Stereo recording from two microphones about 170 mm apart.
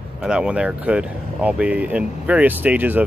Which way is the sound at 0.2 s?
5° right (ahead or behind).